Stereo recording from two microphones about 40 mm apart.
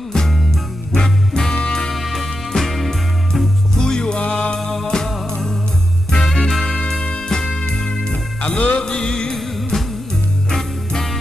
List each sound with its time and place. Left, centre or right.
0.9 s music: centre
1.6 s music: left
1.9 s music: centre
3.7 s music: centre
4.6 s music: centre
6.6 s music: left
7.2 s music: left
8.1 s music: left
8.8 s music: centre
9.3 s music: centre